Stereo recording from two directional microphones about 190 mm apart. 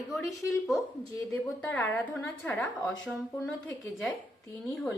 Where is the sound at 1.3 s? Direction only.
5° left (ahead or behind).